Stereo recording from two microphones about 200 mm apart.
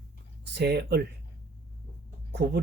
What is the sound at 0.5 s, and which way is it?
Speech, 55° right (ahead or behind).